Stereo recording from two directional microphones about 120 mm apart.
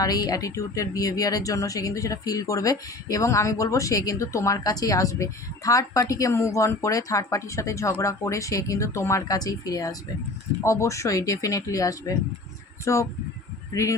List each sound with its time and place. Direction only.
0.0 s speech: 30° left (ahead or behind)